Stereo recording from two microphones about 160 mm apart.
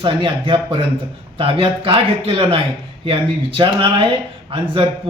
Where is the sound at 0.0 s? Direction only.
30° right (ahead or behind).